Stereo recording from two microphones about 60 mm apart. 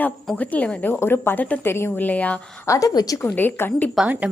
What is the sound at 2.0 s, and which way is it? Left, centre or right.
Speech, left.